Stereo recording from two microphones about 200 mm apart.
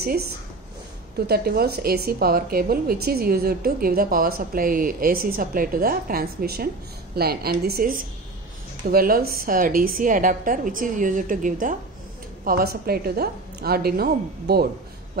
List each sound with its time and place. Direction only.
1.1 s a woman's voice: 50° right (ahead or behind)